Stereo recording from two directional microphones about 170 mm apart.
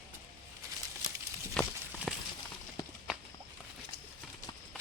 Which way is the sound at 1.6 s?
5° left (ahead or behind).